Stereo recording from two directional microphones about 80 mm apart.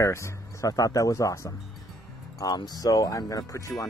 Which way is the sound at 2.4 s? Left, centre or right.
Left.